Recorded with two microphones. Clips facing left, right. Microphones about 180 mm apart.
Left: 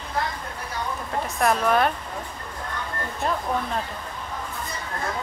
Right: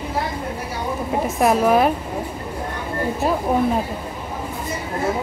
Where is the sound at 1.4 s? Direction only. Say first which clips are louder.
Right 5 dB; 5° right (ahead or behind).